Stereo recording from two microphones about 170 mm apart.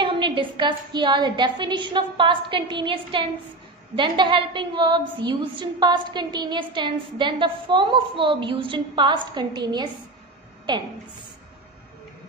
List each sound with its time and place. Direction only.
0.0 s a woman's voice: 30° right (ahead or behind)